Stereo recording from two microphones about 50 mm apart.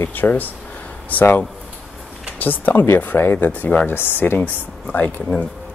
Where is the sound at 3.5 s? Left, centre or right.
Left.